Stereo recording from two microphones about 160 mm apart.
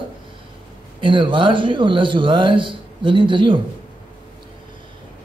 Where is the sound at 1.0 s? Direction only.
30° right (ahead or behind).